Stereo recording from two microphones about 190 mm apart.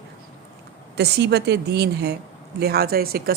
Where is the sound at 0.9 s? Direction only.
60° right (ahead or behind).